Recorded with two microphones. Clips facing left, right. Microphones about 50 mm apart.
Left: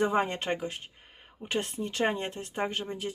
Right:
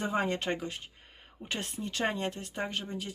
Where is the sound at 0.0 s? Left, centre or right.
Left.